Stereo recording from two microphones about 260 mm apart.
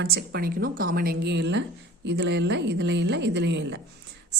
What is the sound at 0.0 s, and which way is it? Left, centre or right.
A woman's voice, right.